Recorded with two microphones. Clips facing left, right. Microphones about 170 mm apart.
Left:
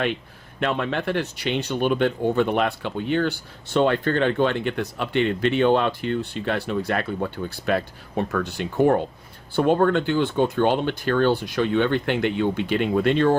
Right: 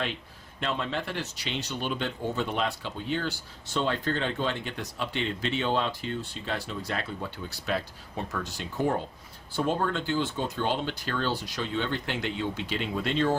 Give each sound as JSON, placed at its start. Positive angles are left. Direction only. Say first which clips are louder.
{"t": 0.6, "sound": "speech", "louder": "left 7 dB", "side_deg": 60}